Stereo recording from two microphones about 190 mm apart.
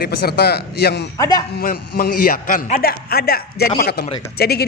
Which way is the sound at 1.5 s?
55° left (ahead or behind).